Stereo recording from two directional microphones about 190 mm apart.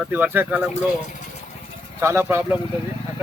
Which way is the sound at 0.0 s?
10° right (ahead or behind).